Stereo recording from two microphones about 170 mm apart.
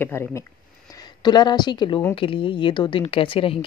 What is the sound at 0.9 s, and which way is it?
A woman's voice, 25° left (ahead or behind).